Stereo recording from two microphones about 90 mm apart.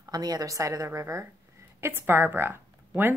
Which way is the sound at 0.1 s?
45° right (ahead or behind).